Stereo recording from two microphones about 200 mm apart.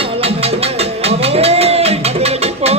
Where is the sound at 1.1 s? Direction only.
30° right (ahead or behind).